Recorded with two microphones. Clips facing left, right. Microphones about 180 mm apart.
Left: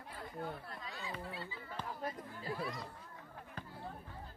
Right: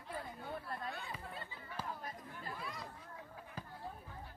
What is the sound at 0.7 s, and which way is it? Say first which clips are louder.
Chatter: right 2 dB; 55° right (ahead or behind).